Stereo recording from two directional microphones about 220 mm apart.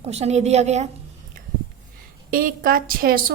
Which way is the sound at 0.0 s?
30° right (ahead or behind).